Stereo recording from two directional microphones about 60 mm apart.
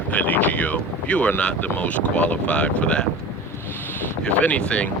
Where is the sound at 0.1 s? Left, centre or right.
Left.